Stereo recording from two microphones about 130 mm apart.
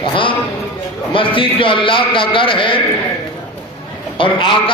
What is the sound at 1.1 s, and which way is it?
A man's voice, 40° left (ahead or behind).